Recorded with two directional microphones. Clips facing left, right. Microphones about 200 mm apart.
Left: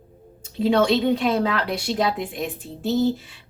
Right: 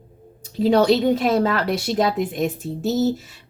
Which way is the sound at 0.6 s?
40° right (ahead or behind).